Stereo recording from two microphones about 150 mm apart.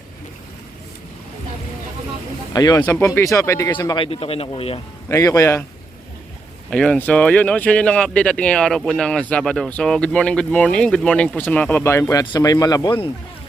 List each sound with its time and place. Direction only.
2.5 s speech: 25° left (ahead or behind)
3.8 s a man's voice: 35° left (ahead or behind)
5.0 s speech: 20° left (ahead or behind)
6.7 s speech: 5° left (ahead or behind); by 13.1 s 30° left (ahead or behind)